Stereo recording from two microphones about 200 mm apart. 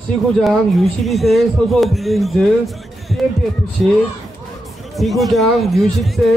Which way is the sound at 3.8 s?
Centre (ahead or behind).